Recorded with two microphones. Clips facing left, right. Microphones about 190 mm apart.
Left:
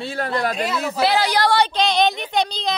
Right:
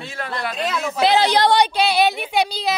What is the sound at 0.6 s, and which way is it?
Speech, 10° left (ahead or behind).